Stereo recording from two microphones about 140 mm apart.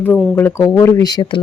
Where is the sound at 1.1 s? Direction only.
35° left (ahead or behind).